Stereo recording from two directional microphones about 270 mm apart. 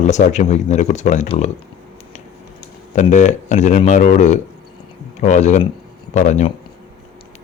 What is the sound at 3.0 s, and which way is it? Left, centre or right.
Speech, left.